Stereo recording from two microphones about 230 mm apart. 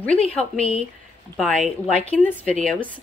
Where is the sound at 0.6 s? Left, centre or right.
Left.